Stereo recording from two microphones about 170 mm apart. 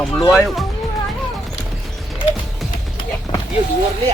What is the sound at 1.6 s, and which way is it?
Clip-clop, 5° left (ahead or behind).